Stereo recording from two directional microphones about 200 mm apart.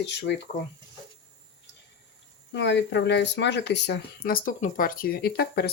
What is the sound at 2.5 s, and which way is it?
Speech, 60° left (ahead or behind).